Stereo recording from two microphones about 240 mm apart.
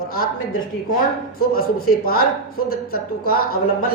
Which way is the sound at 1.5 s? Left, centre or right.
Left.